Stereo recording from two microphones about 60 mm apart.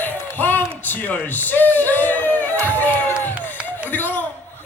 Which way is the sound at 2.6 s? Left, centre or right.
Left.